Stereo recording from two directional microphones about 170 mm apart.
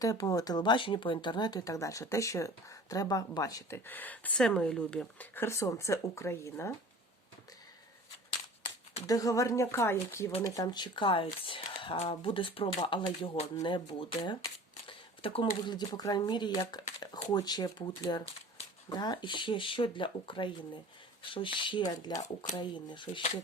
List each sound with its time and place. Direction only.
0.0 s speech: 20° left (ahead or behind)
9.0 s speech: 20° left (ahead or behind)
14.8 s a sound: 30° left (ahead or behind)
15.7 s speech: 25° left (ahead or behind)
17.0 s a sound: 25° left (ahead or behind)
17.3 s speech: 25° left (ahead or behind)